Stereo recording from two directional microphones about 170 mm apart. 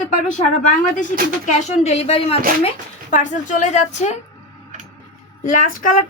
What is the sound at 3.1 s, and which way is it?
Speech, 45° left (ahead or behind).